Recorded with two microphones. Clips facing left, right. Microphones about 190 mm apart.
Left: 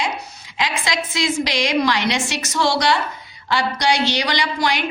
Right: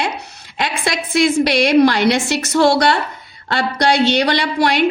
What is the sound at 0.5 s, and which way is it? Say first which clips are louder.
Speech: right 3 dB; 55° right (ahead or behind).